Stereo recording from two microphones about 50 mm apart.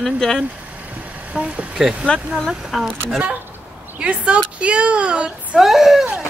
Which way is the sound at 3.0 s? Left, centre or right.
Right.